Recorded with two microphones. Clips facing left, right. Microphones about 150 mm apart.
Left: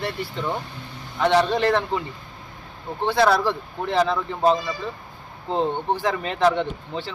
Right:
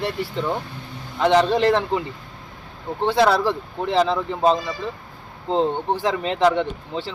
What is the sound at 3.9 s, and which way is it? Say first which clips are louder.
Speech: right 2 dB; 20° right (ahead or behind).